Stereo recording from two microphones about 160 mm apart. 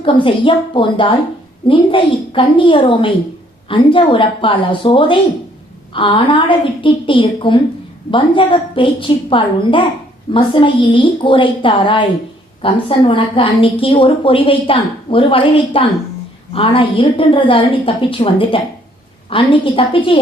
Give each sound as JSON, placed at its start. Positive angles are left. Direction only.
{"t": 0.0, "sound": "a woman's voice", "side_deg": 30}